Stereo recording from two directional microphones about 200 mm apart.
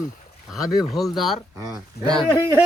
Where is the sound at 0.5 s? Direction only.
Centre (ahead or behind).